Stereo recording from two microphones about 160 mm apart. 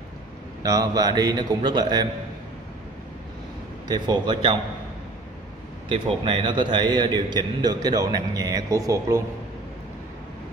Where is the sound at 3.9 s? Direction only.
25° right (ahead or behind).